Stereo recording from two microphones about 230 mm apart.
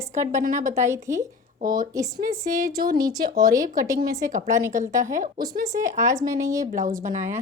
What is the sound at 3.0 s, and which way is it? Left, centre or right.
A woman's voice, centre.